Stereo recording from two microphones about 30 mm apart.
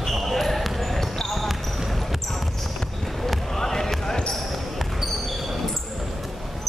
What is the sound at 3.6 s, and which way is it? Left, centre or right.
Basketball bounce, centre.